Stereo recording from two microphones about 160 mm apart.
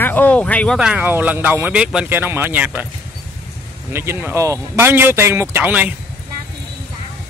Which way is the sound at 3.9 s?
15° right (ahead or behind).